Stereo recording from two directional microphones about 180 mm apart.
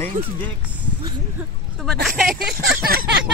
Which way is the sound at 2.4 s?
60° right (ahead or behind).